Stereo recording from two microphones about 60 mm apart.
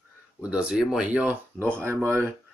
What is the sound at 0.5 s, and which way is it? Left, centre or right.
Speech, centre.